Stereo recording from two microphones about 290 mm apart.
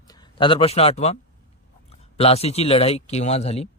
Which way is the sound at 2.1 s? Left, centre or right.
Left.